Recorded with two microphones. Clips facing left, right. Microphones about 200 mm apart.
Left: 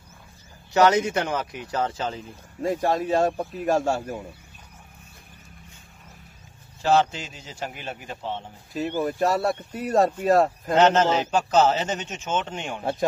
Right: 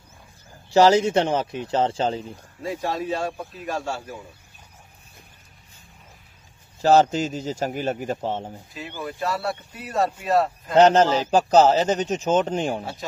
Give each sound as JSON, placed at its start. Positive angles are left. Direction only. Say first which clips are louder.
{"t": 0.7, "sound": "speech", "louder": "right 3 dB", "side_deg": -30}
{"t": 2.6, "sound": "a man's voice", "louder": "left 4 dB", "side_deg": 45}
{"t": 6.8, "sound": "speech", "louder": "right 4 dB", "side_deg": -40}
{"t": 9.0, "sound": "a man's voice", "louder": "left 3 dB", "side_deg": 40}
{"t": 10.8, "sound": "speech", "louder": "right 3 dB", "side_deg": -35}